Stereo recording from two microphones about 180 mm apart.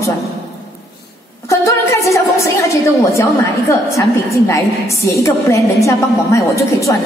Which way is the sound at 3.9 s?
15° left (ahead or behind).